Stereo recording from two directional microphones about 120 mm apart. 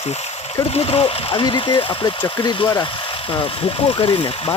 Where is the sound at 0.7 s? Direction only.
55° left (ahead or behind).